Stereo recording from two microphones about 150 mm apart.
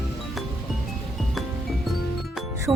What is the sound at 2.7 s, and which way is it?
Speech, 5° right (ahead or behind).